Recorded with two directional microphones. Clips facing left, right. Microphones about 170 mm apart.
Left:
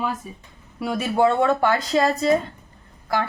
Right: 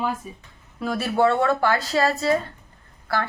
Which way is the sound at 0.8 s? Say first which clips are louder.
Left 1 dB; 15° left (ahead or behind).